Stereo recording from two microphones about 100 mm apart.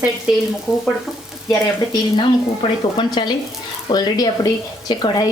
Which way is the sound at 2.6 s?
65° left (ahead or behind).